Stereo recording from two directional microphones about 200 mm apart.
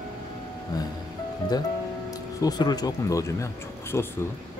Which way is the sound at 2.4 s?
20° left (ahead or behind).